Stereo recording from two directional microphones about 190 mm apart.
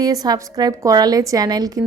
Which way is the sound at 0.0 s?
20° right (ahead or behind).